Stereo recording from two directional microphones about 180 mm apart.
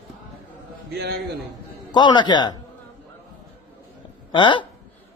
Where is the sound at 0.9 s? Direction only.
65° right (ahead or behind).